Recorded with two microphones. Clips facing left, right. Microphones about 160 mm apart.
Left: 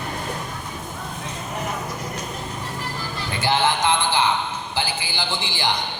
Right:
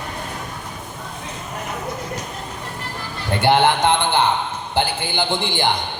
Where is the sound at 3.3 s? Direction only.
60° right (ahead or behind).